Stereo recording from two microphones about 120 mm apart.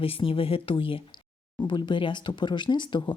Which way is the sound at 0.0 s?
50° left (ahead or behind).